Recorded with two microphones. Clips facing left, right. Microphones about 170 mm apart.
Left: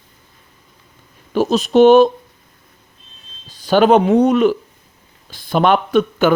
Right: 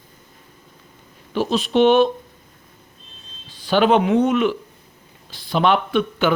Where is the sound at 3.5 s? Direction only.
45° left (ahead or behind).